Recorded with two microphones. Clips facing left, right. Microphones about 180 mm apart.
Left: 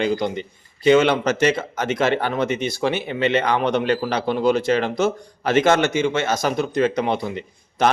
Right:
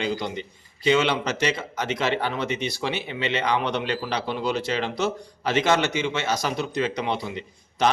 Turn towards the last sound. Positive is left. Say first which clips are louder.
# left 3 dB
turn(degrees=50)  # may be behind; listen again after turning